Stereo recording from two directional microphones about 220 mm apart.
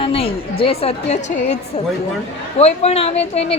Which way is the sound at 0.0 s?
25° left (ahead or behind).